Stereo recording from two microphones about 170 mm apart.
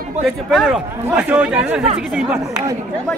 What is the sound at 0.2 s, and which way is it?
Speech, centre (ahead or behind).